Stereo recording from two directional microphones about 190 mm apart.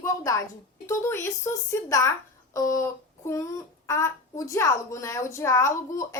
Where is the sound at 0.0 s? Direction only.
15° left (ahead or behind).